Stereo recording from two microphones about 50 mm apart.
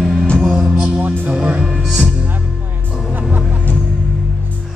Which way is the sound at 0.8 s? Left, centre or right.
Right.